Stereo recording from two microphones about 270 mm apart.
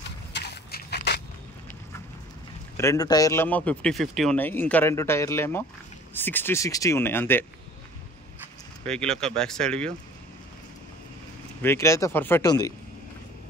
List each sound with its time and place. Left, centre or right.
0.3 s a sound: left
2.8 s speech: centre
8.8 s speech: centre
11.6 s speech: centre